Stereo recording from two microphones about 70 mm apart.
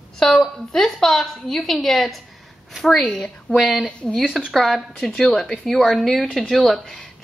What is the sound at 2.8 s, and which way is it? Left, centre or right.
A woman's voice, centre.